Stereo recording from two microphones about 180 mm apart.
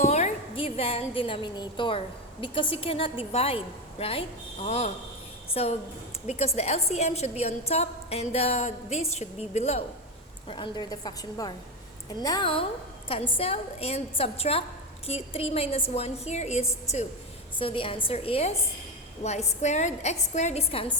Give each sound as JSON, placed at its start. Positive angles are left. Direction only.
{"t": 0.0, "sound": "a woman's voice", "side_deg": 40}
{"t": 10.5, "sound": "a woman's voice", "side_deg": 25}